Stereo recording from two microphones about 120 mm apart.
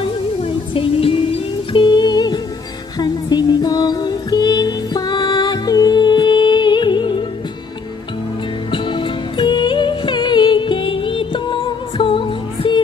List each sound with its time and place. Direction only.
0.4 s music: 50° left (ahead or behind)
8.7 s music: 45° left (ahead or behind)